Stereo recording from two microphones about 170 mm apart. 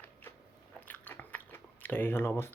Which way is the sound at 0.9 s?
10° left (ahead or behind).